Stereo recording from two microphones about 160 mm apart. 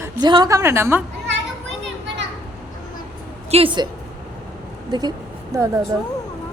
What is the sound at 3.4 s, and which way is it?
Speech, 35° right (ahead or behind).